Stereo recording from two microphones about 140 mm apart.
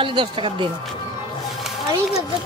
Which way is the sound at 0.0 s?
35° right (ahead or behind).